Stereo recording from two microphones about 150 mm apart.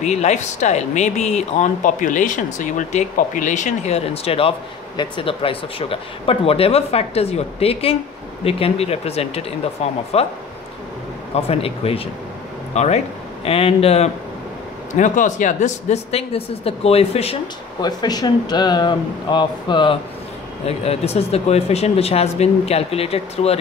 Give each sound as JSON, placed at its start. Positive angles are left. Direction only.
{"t": 0.0, "sound": "speech", "side_deg": 50}
{"t": 11.3, "sound": "speech", "side_deg": 40}
{"t": 15.0, "sound": "speech", "side_deg": 55}
{"t": 17.7, "sound": "speech", "side_deg": 25}
{"t": 20.6, "sound": "speech", "side_deg": 45}